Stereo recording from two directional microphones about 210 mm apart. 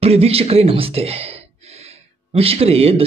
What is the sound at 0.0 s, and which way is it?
A man's voice, 30° right (ahead or behind).